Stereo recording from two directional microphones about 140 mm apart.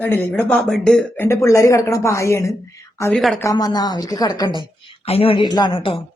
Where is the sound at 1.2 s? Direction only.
20° left (ahead or behind).